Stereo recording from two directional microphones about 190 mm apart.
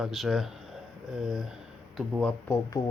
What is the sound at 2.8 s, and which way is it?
Speech, 20° left (ahead or behind).